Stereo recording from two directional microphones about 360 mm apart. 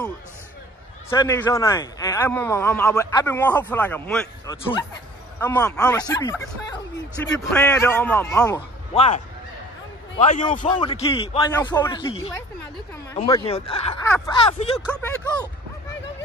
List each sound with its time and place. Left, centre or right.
1.1 s a man's voice: centre
8.9 s a man's voice: centre
14.8 s a man's voice: centre